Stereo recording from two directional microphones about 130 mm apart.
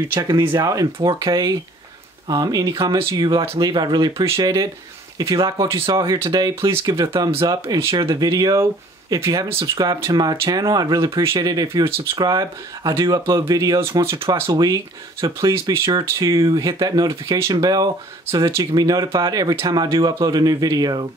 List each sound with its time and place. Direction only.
0.1 s speech: 25° right (ahead or behind)
5.9 s speech: 30° right (ahead or behind)